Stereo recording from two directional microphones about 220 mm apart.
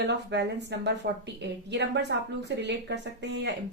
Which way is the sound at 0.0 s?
50° right (ahead or behind).